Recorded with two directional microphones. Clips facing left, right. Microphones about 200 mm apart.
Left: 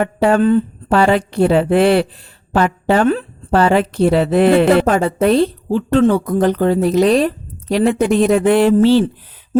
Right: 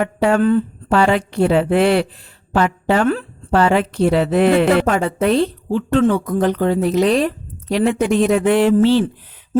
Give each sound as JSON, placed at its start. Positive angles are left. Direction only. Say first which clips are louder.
{"t": 0.0, "sound": "a woman's voice", "louder": "left 2 dB", "side_deg": 35}